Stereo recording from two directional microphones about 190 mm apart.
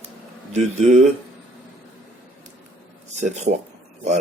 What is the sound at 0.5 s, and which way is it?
Speech, 40° right (ahead or behind).